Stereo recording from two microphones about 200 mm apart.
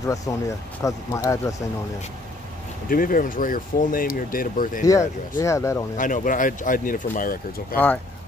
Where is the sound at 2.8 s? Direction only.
45° left (ahead or behind).